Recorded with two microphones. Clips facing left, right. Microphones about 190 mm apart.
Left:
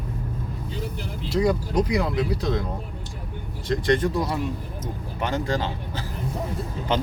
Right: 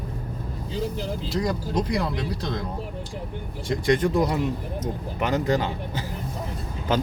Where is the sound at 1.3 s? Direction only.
5° left (ahead or behind).